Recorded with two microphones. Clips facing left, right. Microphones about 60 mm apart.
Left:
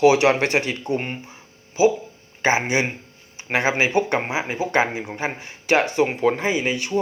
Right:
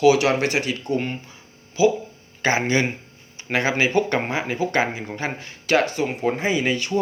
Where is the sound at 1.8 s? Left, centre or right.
Left.